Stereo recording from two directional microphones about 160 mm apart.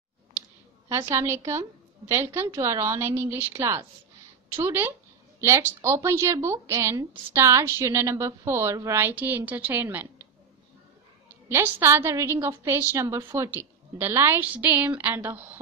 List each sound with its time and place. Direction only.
0.8 s a woman's voice: 15° right (ahead or behind)
11.4 s a woman's voice: 15° right (ahead or behind)